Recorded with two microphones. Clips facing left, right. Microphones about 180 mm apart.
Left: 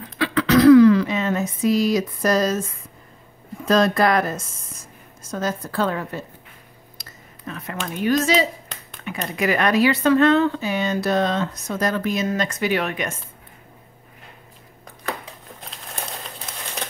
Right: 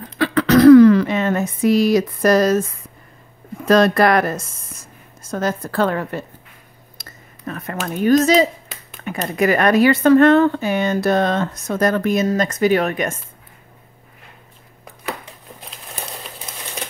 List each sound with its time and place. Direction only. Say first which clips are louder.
0.2 s throat clearing: right 4 dB; 45° right (ahead or behind); by 2.6 s 65° right (ahead or behind)
3.6 s a woman's voice: right 4 dB; 70° right (ahead or behind)
7.0 s a sound: right 4 dB; 50° right (ahead or behind)
7.8 s speech: right 6 dB; 45° right (ahead or behind)
12.3 s speech: right 6 dB; 40° right (ahead or behind)